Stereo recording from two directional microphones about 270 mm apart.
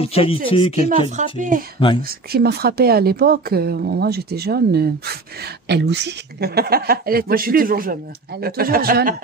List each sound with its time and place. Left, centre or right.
0.0 s speech: left
1.1 s speech: right